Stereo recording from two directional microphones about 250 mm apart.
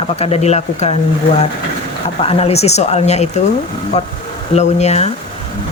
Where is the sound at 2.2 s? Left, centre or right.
Left.